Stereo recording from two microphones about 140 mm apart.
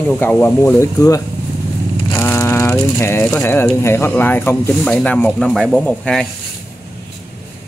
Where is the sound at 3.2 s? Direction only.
15° left (ahead or behind).